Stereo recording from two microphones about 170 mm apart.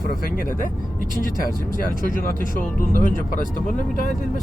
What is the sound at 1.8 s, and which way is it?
Speech, 55° left (ahead or behind).